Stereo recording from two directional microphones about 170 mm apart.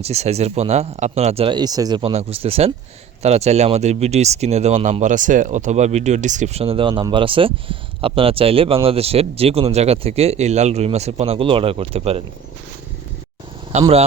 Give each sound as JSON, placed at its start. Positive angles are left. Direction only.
{"t": 0.0, "sound": "speech", "side_deg": -40}
{"t": 2.0, "sound": "speech", "side_deg": -35}
{"t": 13.7, "sound": "speech", "side_deg": -40}